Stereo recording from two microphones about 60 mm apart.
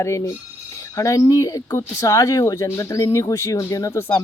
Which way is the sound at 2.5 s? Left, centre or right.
Left.